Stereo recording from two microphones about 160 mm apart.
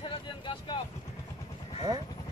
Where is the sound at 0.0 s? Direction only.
30° left (ahead or behind).